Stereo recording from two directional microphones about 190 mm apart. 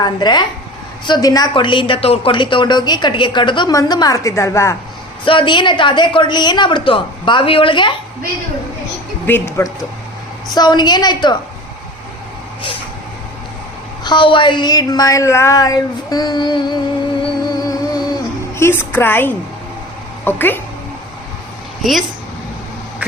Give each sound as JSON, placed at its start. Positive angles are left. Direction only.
{"t": 0.0, "sound": "a woman's voice", "side_deg": 20}
{"t": 5.2, "sound": "a woman's voice", "side_deg": 25}
{"t": 9.2, "sound": "a woman's voice", "side_deg": 10}
{"t": 10.5, "sound": "a woman's voice", "side_deg": 20}
{"t": 14.0, "sound": "a woman's voice", "side_deg": 25}
{"t": 17.5, "sound": "music", "side_deg": 20}
{"t": 18.5, "sound": "a woman's voice", "side_deg": 15}